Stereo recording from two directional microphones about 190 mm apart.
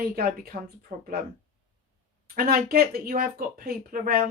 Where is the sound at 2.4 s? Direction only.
50° right (ahead or behind).